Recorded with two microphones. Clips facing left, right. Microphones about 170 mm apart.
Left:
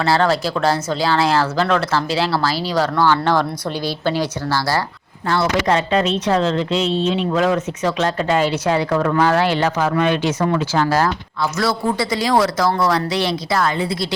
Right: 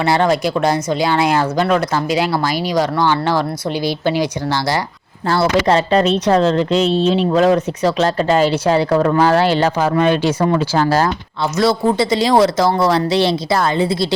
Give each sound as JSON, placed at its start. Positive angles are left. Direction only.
{"t": 0.0, "sound": "speech", "side_deg": -15}
{"t": 5.3, "sound": "speech", "side_deg": -35}